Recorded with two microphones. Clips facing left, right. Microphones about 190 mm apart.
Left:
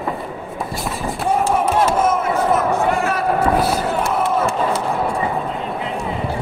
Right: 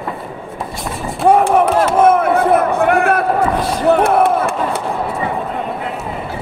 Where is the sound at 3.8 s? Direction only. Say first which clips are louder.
Right 8 dB; 65° right (ahead or behind).